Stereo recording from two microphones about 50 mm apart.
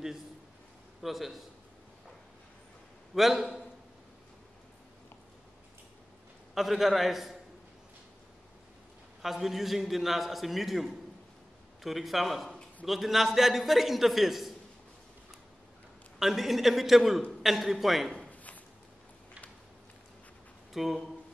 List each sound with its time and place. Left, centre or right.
1.0 s a man's voice: centre
3.2 s a man's voice: centre
6.5 s a man's voice: centre
9.2 s a man's voice: centre
16.2 s a man's voice: centre
18.3 s a sound: left
20.7 s a man's voice: centre